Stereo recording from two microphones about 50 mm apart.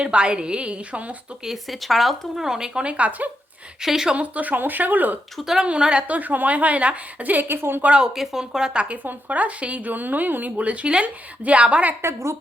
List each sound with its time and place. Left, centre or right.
0.0 s speech: right
1.5 s speech: centre
3.0 s a woman's voice: right
3.8 s speech: centre
4.1 s a woman's voice: right
5.4 s speech: centre
5.8 s speech: centre
6.1 s a woman's voice: right
7.9 s speech: centre
12.0 s a woman's voice: right